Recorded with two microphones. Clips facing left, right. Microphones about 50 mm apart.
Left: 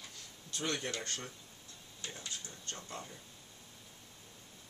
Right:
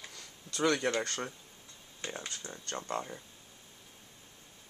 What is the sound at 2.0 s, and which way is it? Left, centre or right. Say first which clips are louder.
Speech: right 5 dB; right.